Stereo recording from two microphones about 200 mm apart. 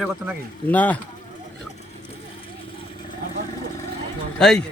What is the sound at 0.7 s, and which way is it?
Speech, 10° left (ahead or behind).